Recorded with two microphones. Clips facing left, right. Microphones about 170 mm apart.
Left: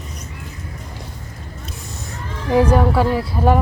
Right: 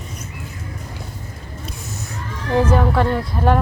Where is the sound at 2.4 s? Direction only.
15° left (ahead or behind).